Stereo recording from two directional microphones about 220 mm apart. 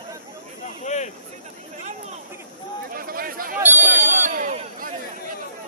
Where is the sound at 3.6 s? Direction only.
10° right (ahead or behind).